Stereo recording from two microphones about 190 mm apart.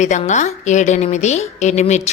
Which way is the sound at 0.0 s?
40° left (ahead or behind).